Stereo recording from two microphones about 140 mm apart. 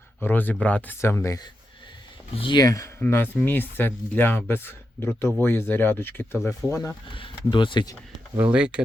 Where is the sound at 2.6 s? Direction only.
20° left (ahead or behind).